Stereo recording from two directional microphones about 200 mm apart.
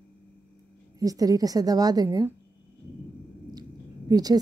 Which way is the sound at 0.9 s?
15° right (ahead or behind).